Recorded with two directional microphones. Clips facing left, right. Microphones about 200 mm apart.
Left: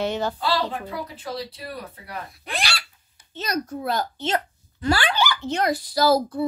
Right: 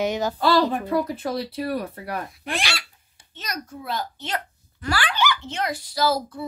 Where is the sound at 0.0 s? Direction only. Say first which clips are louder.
Right 1 dB; 10° right (ahead or behind).